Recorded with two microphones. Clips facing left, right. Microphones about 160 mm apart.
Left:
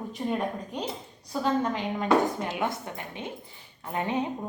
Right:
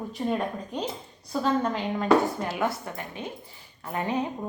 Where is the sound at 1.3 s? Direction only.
15° left (ahead or behind).